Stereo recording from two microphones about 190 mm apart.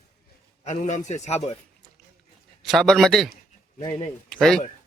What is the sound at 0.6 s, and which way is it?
Speech, 35° left (ahead or behind).